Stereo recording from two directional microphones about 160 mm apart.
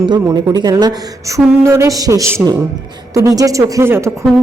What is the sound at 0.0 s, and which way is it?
A woman's voice, 25° right (ahead or behind).